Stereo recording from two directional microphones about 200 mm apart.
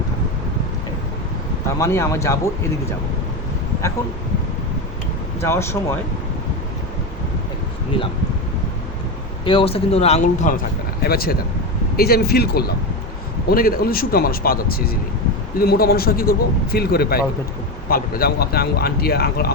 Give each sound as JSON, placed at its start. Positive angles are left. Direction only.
{"t": 1.8, "sound": "a man's voice", "side_deg": 15}
{"t": 5.4, "sound": "a man's voice", "side_deg": 10}
{"t": 9.4, "sound": "a man's voice", "side_deg": 25}
{"t": 11.0, "sound": "speech", "side_deg": 50}